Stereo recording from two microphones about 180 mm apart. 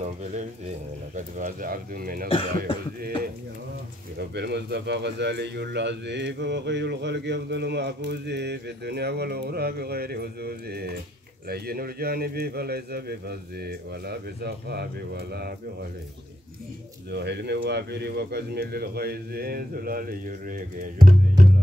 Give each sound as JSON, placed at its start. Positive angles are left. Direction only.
{"t": 1.1, "sound": "speech", "side_deg": -50}
{"t": 2.2, "sound": "cough", "side_deg": 30}
{"t": 4.2, "sound": "speech", "side_deg": -65}
{"t": 17.1, "sound": "speech", "side_deg": -70}